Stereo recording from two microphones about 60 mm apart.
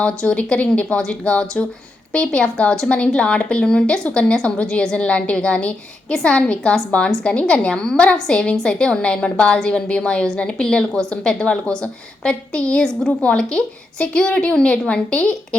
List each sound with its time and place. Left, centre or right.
0.0 s a woman's voice: centre